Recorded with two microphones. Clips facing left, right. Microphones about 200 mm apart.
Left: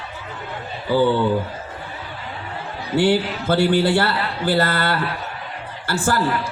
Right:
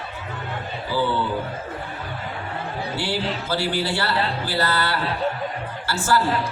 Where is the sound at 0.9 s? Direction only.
55° left (ahead or behind).